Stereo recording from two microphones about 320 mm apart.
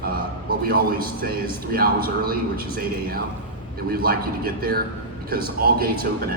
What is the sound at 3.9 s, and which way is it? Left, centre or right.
A man's voice, right.